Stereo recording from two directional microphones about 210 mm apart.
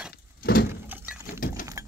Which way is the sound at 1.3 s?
40° left (ahead or behind).